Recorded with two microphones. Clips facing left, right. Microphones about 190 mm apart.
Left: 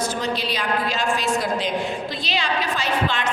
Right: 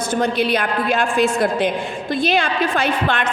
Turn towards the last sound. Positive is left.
turn(degrees=-55)  # may be behind; listen again after turning